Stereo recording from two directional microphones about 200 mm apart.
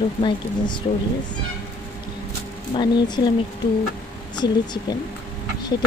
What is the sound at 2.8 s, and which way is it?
Speech, 20° left (ahead or behind).